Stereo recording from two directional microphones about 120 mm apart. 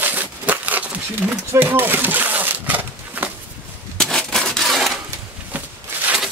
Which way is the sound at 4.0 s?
5° left (ahead or behind).